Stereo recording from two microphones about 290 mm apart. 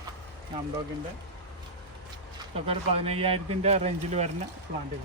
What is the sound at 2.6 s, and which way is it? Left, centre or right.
A man's voice, centre.